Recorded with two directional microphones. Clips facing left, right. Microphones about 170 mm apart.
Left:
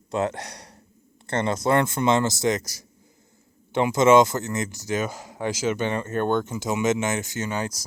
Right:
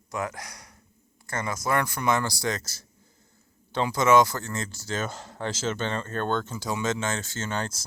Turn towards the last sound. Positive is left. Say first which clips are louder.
# left 3 dB
turn(degrees=10)  # may be behind; listen again after turning